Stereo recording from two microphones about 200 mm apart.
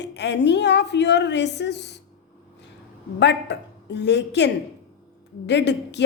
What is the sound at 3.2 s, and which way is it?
A woman's voice, 60° left (ahead or behind).